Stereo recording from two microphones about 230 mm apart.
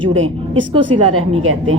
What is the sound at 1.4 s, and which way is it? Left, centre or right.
Speech, right.